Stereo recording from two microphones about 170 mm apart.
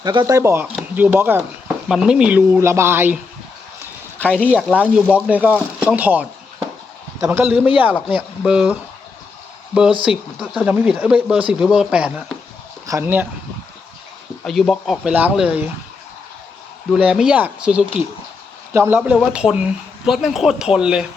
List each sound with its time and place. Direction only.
0.0 s speech: 25° right (ahead or behind)
4.2 s speech: 10° left (ahead or behind)
4.8 s speech: 5° right (ahead or behind)
14.4 s speech: centre (ahead or behind)
16.9 s speech: 5° right (ahead or behind)
18.9 s speech: 5° right (ahead or behind)